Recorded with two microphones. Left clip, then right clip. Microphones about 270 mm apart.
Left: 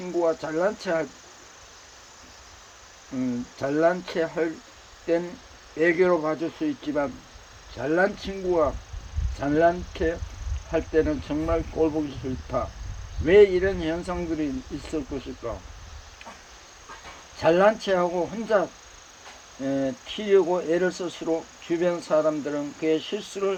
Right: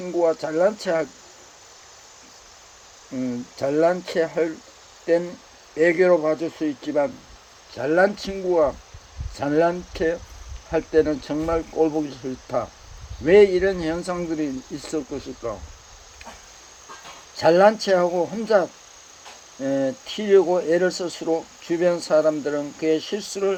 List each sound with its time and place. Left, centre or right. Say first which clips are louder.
0.0 s speech: right 4 dB; centre
3.2 s speech: right 2 dB; centre
5.7 s speech: right 4 dB; centre
17.3 s speech: right 4 dB; centre
19.6 s speech: right 4 dB; centre